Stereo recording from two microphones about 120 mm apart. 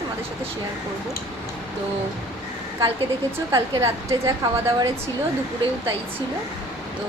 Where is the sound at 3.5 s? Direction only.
25° right (ahead or behind).